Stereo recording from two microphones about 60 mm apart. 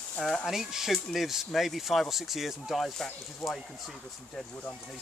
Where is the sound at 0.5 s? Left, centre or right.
Centre.